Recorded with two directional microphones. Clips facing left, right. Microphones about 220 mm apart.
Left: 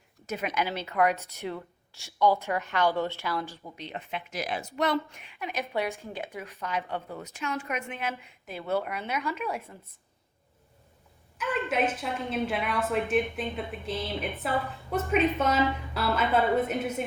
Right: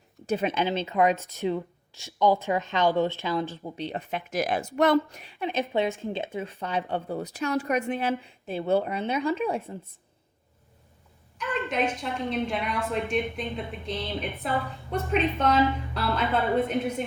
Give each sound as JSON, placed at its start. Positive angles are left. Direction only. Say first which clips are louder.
{"t": 0.3, "sound": "a woman's voice", "louder": "right 5 dB", "side_deg": -30}
{"t": 3.6, "sound": "a woman's voice", "louder": "right 7 dB", "side_deg": -30}
{"t": 11.3, "sound": "a sound", "louder": "left 1 dB", "side_deg": 5}
{"t": 12.3, "sound": "a woman's voice", "louder": "even", "side_deg": 5}